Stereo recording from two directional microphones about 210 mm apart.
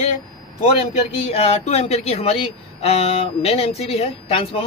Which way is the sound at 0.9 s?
30° left (ahead or behind).